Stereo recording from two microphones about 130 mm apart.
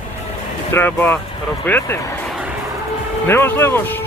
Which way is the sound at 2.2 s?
Centre (ahead or behind).